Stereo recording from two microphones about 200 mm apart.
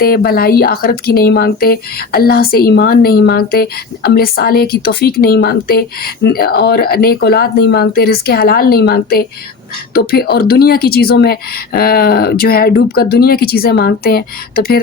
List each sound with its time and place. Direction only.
0.0 s speech: 50° left (ahead or behind)